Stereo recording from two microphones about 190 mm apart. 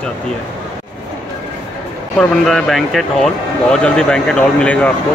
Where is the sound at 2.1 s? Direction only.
Centre (ahead or behind).